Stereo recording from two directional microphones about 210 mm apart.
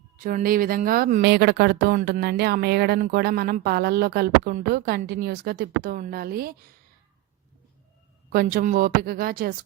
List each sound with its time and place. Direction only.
0.2 s a woman's voice: 40° right (ahead or behind)
8.3 s a woman's voice: 45° right (ahead or behind)